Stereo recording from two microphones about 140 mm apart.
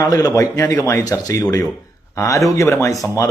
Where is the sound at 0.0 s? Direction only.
25° left (ahead or behind).